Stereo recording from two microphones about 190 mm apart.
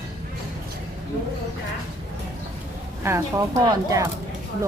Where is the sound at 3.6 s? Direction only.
20° right (ahead or behind).